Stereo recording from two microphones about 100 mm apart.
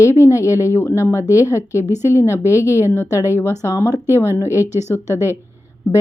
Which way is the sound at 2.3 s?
30° left (ahead or behind).